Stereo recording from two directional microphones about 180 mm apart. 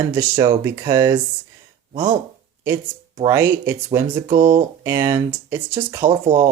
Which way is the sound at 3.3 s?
10° right (ahead or behind).